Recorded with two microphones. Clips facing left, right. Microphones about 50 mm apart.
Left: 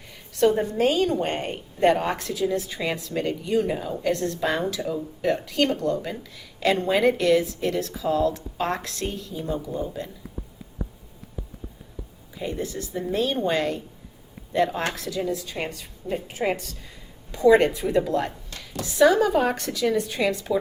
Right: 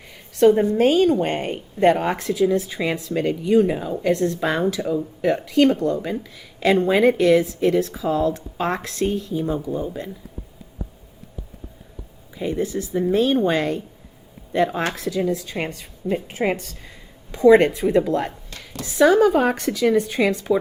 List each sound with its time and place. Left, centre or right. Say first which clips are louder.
0.3 s a woman's voice: right 5 dB; right
12.4 s a woman's voice: right 6 dB; centre
15.0 s a woman's voice: right 5 dB; right